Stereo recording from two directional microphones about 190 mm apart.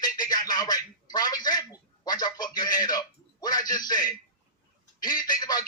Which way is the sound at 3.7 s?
20° left (ahead or behind).